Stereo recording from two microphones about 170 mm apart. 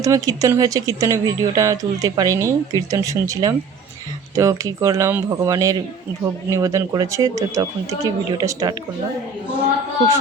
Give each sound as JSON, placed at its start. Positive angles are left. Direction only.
{"t": 0.0, "sound": "speech", "side_deg": -20}